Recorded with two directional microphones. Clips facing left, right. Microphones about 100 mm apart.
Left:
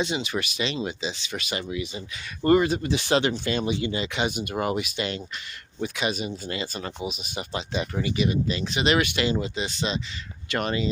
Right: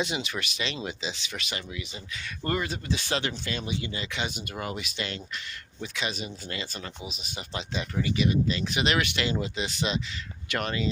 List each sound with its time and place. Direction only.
0.0 s speech: centre (ahead or behind)
2.5 s speech: 20° left (ahead or behind)
4.8 s speech: 10° left (ahead or behind)
10.6 s speech: 10° left (ahead or behind)